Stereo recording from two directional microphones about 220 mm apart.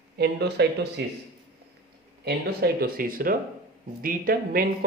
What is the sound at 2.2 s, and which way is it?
Speech, 45° right (ahead or behind).